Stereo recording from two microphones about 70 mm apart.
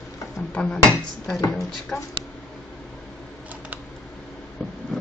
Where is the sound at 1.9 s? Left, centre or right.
Left.